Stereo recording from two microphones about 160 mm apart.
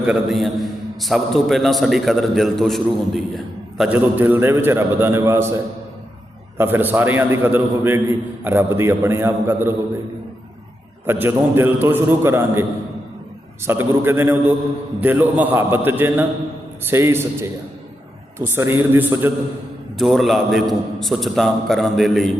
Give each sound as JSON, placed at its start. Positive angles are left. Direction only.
{"t": 0.0, "sound": "a man's voice", "side_deg": -5}
{"t": 6.6, "sound": "a man's voice", "side_deg": -10}
{"t": 11.0, "sound": "a man's voice", "side_deg": -15}
{"t": 13.7, "sound": "a man's voice", "side_deg": -15}
{"t": 20.0, "sound": "a man's voice", "side_deg": 0}